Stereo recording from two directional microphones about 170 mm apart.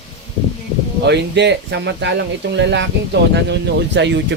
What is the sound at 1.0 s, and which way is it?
Speech, 90° right.